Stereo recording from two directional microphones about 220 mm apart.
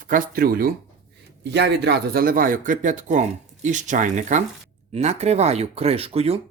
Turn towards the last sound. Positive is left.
turn(degrees=-25)  # may be behind; listen again after turning